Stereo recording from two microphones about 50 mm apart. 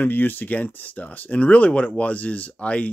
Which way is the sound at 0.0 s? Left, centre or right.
Left.